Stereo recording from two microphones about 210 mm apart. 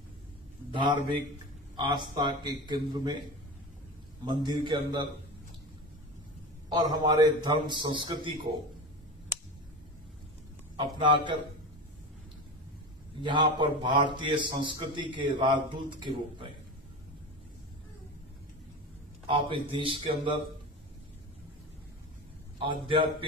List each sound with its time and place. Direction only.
0.7 s a man's voice: 20° right (ahead or behind)
4.2 s a man's voice: 20° right (ahead or behind)
6.7 s a man's voice: 20° right (ahead or behind)
10.8 s a man's voice: 20° right (ahead or behind)
13.2 s a man's voice: 20° right (ahead or behind)
19.2 s a man's voice: 25° right (ahead or behind)
22.6 s a man's voice: 25° right (ahead or behind)